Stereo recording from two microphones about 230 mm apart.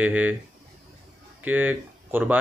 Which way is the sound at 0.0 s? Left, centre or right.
Centre.